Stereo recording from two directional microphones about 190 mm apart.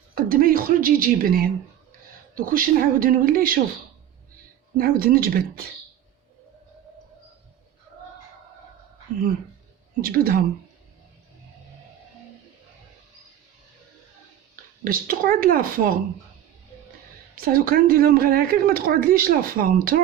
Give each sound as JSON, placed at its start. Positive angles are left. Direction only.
{"t": 0.1, "sound": "a woman's voice", "side_deg": -50}
{"t": 4.8, "sound": "a woman's voice", "side_deg": -50}
{"t": 10.0, "sound": "a woman's voice", "side_deg": -50}
{"t": 14.8, "sound": "a woman's voice", "side_deg": -50}
{"t": 17.3, "sound": "a woman's voice", "side_deg": -50}